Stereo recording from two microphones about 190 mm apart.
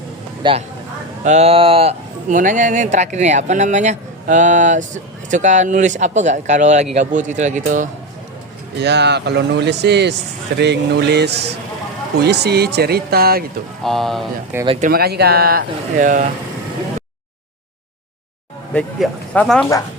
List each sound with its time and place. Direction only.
0.4 s speech: 25° right (ahead or behind)
1.2 s speech: 35° right (ahead or behind)
8.8 s speech: 65° right (ahead or behind)
13.8 s speech: centre (ahead or behind)
14.5 s speech: 10° right (ahead or behind)
14.8 s speech: 55° right (ahead or behind)
18.7 s speech: 5° left (ahead or behind)